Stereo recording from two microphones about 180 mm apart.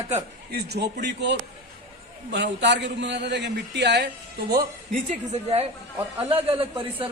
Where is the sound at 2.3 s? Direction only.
75° right (ahead or behind).